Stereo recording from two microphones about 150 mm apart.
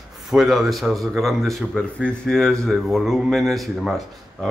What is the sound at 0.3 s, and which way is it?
Speech, 5° right (ahead or behind).